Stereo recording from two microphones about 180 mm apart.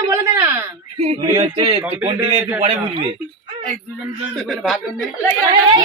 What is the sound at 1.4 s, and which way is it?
Cough, 30° right (ahead or behind).